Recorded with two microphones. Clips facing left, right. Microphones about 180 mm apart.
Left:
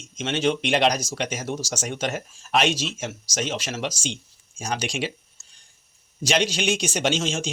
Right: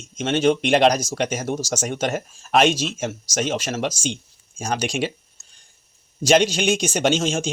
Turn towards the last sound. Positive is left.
turn(degrees=-50)  # may be behind; listen again after turning